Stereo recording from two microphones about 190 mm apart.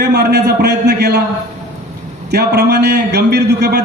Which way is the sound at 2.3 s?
60° right (ahead or behind).